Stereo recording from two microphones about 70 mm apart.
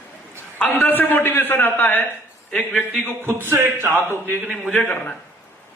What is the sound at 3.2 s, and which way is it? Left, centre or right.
Speech, right.